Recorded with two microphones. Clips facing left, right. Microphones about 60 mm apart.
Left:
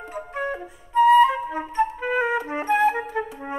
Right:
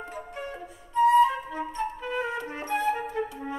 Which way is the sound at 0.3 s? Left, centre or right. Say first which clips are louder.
Left 8 dB; left.